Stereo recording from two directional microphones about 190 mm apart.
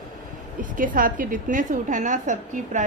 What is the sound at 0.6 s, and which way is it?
A woman's voice, 45° right (ahead or behind).